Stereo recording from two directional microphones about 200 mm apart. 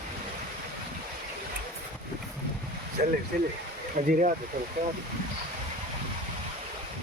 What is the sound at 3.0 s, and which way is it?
Speech, 45° right (ahead or behind).